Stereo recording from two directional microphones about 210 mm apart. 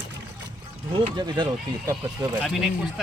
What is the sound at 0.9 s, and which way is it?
Speech, 20° right (ahead or behind).